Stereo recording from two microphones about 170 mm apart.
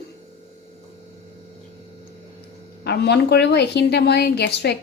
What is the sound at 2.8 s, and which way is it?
A woman's voice, 70° left (ahead or behind).